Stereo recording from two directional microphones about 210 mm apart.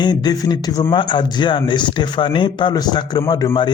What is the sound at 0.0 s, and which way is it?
Speech, 20° left (ahead or behind).